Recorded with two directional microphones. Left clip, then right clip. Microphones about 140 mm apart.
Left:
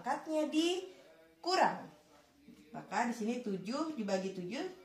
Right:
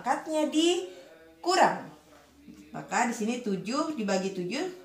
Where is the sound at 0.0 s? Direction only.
30° left (ahead or behind).